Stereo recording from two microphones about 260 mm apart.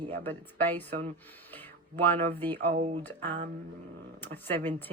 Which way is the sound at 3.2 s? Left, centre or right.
Right.